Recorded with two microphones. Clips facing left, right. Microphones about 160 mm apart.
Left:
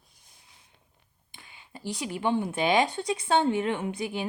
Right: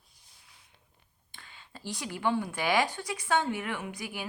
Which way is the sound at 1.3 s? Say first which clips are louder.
Left 3 dB; 15° left (ahead or behind).